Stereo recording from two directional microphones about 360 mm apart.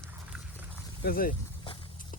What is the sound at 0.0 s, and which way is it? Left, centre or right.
Dog, centre.